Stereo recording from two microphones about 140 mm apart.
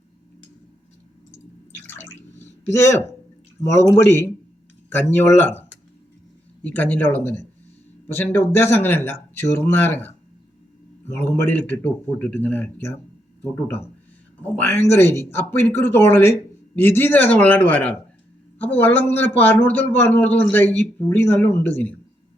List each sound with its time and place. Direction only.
1.7 s drip: 15° left (ahead or behind)
2.6 s a man's voice: 20° left (ahead or behind)
11.1 s a man's voice: 15° left (ahead or behind)